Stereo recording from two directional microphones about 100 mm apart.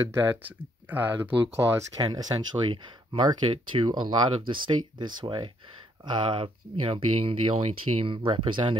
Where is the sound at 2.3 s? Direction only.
55° right (ahead or behind).